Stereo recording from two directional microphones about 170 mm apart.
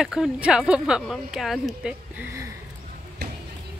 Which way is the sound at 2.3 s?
15° right (ahead or behind).